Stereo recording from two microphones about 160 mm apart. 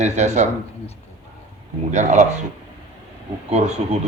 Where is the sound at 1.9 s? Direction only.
45° right (ahead or behind).